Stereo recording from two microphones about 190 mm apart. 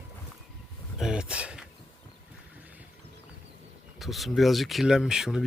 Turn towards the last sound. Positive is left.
turn(degrees=0)  # may be behind; listen again after turning